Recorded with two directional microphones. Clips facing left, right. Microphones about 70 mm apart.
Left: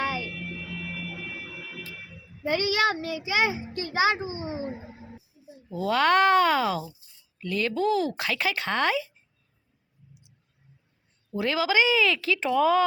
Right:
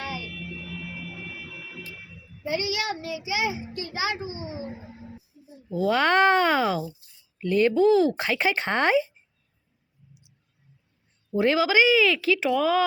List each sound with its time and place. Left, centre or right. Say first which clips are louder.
0.0 s music: left 5 dB; left
1.4 s a sound: left 1 dB; left
2.4 s a child's voice: left 4 dB; left
5.9 s speech: even; right
7.3 s speech: right 7 dB; right
7.8 s speech: right 4 dB; centre
11.3 s speech: right 3 dB; right; by 12.8 s centre